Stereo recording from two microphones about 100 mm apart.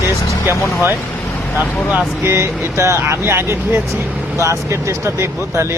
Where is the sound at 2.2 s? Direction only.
25° right (ahead or behind).